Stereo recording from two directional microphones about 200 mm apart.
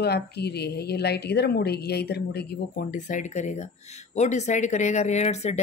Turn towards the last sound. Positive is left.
turn(degrees=35)  # may be behind; listen again after turning